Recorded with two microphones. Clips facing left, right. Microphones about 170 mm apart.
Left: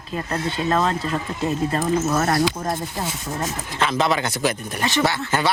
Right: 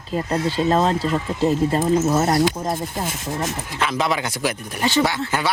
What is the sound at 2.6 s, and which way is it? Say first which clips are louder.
Speech: right 1 dB; 10° right (ahead or behind).